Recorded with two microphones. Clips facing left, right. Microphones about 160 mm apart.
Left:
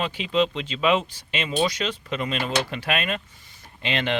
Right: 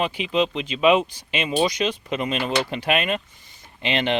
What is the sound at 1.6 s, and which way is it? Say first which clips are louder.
Speech: right 3 dB; 15° right (ahead or behind).